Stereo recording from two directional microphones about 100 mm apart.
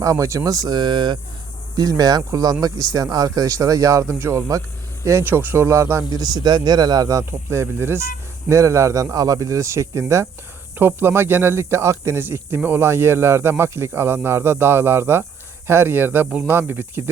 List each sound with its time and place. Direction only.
0.0 s speech: 30° right (ahead or behind)
5.2 s speech: 20° right (ahead or behind)
6.1 s speech: 45° right (ahead or behind); by 17.0 s 20° right (ahead or behind)